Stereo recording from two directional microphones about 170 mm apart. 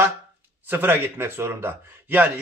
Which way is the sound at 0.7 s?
10° right (ahead or behind).